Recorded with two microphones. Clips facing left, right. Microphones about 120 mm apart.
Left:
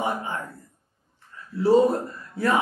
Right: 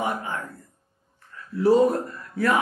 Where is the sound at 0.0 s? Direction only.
25° left (ahead or behind).